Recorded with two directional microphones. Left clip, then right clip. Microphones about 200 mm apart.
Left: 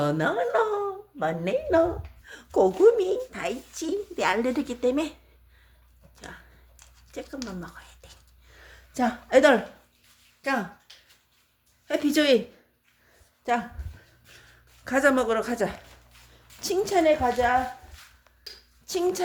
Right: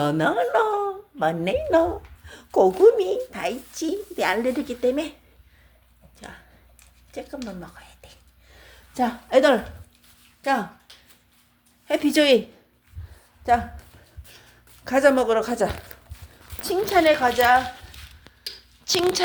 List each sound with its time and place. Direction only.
0.0 s a woman's voice: 15° right (ahead or behind)
1.7 s speech: centre (ahead or behind)
6.1 s speech: centre (ahead or behind)
8.5 s a sound: 10° left (ahead or behind)
11.9 s speech: 10° right (ahead or behind)
13.4 s a woman's voice: 5° left (ahead or behind)
14.8 s speech: 5° right (ahead or behind)
18.9 s speech: 10° right (ahead or behind)